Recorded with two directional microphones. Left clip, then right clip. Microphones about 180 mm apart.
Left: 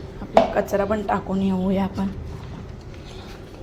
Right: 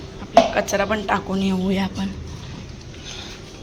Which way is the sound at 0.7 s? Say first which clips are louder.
Right 1 dB; centre (ahead or behind).